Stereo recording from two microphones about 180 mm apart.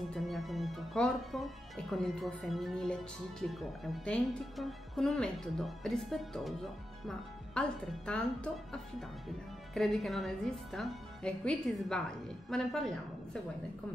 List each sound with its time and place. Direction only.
0.1 s speech: centre (ahead or behind)
9.8 s speech: centre (ahead or behind)